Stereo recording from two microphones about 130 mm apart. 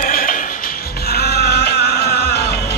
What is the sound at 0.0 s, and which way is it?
Music, 90° left.